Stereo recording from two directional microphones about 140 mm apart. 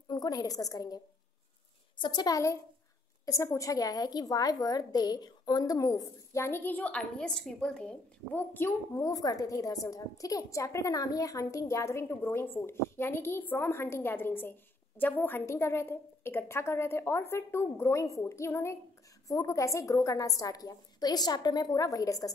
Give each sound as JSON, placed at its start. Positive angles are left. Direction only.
{"t": 0.1, "sound": "a woman's voice", "side_deg": 30}